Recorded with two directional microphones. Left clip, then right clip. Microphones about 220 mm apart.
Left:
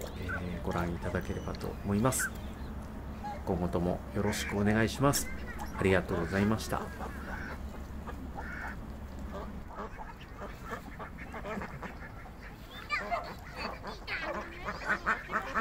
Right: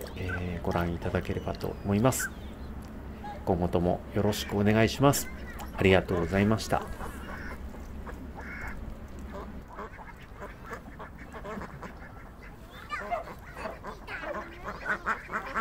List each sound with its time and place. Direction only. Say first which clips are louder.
0.3 s a man's voice: right 4 dB; 20° right (ahead or behind)
3.4 s a man's voice: right 6 dB; 10° right (ahead or behind)
11.4 s duck: even; 25° right (ahead or behind)
14.0 s a sound: left 2 dB; 50° right (ahead or behind)
14.7 s duck: even; 20° right (ahead or behind)